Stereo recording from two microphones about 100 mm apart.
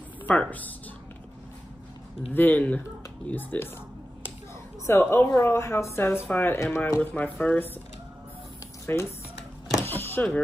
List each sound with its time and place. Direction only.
0.2 s speech: 15° left (ahead or behind)
2.3 s a woman's voice: 20° left (ahead or behind)
4.8 s a woman's voice: 25° left (ahead or behind)
7.0 s a woman's voice: 15° left (ahead or behind)
8.9 s a woman's voice: 20° left (ahead or behind)
9.8 s vehicle: 20° left (ahead or behind)